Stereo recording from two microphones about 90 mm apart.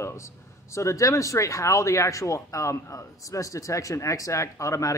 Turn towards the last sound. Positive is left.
turn(degrees=35)  # may be behind; listen again after turning